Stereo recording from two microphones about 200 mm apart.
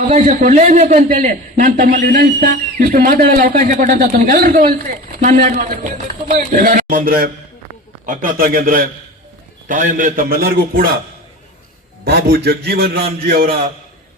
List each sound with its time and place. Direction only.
0.1 s a man's voice: 35° right (ahead or behind)
12.0 s a man's voice: 55° right (ahead or behind)